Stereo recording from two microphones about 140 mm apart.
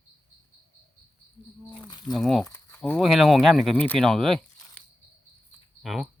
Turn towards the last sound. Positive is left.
turn(degrees=0)  # may be behind; listen again after turning